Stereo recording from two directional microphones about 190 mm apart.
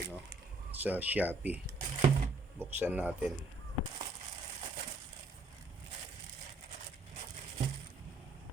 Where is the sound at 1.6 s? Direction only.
45° right (ahead or behind).